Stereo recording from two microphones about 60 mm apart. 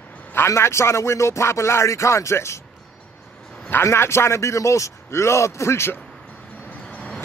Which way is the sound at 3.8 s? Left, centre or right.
Left.